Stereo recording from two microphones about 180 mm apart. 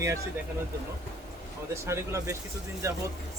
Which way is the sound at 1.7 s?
15° right (ahead or behind).